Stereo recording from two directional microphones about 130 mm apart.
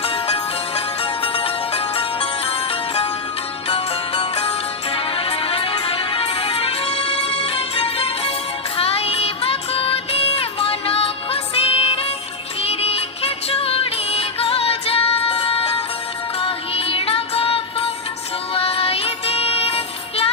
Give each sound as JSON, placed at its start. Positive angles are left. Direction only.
{"t": 0.0, "sound": "music", "side_deg": 50}